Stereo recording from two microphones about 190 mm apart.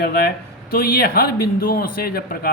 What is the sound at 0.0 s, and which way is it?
A man's voice, 55° left (ahead or behind).